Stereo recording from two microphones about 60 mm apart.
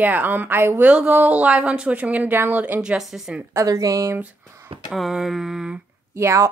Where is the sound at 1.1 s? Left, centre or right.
Right.